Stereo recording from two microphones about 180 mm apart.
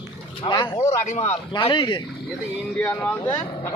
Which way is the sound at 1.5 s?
30° left (ahead or behind).